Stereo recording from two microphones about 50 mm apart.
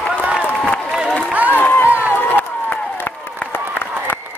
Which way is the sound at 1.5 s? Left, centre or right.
Left.